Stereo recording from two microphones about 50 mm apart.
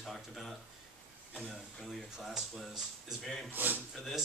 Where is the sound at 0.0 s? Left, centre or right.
Centre.